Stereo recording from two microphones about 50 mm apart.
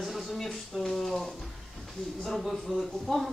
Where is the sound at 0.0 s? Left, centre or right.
Centre.